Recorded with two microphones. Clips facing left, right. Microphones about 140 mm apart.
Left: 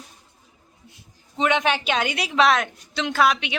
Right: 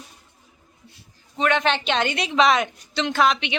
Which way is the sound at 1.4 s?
15° left (ahead or behind).